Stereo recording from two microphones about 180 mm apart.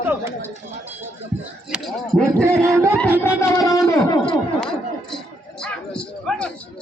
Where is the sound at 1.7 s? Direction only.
Centre (ahead or behind).